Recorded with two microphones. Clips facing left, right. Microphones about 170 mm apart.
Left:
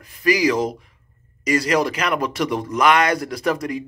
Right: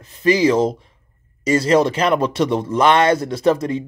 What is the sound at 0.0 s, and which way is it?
Speech, 25° right (ahead or behind).